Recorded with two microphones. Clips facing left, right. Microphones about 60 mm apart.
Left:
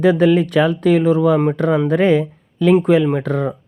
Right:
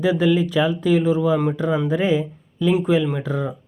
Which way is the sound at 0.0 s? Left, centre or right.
Left.